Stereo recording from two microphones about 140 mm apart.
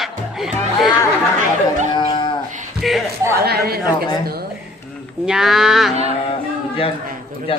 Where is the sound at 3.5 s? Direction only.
90° right.